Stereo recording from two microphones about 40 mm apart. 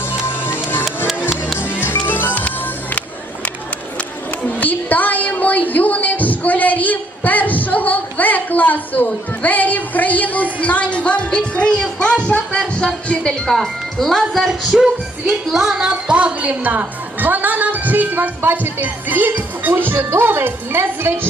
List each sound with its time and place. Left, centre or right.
0.4 s music: left
4.4 s a sound: left
10.6 s speech: left; by 13.5 s centre
13.5 s speech: centre
14.4 s a sound: centre
15.8 s a woman's voice: right